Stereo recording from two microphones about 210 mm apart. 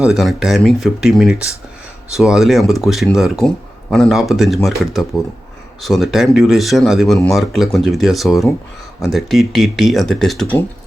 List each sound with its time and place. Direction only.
0.0 s speech: centre (ahead or behind)